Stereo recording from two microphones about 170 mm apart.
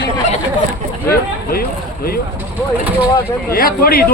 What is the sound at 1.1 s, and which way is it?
Speech, 60° left (ahead or behind).